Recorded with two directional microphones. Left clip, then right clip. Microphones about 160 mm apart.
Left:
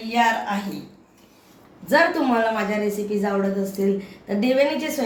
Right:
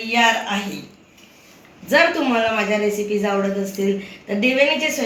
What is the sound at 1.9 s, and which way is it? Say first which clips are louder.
Speech: right 2 dB; 20° left (ahead or behind).